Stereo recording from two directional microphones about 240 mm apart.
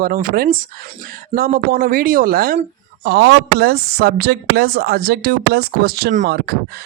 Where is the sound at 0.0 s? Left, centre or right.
Right.